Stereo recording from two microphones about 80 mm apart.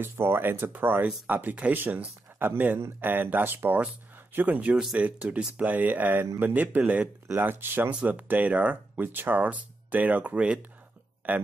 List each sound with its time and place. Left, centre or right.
0.0 s speech: right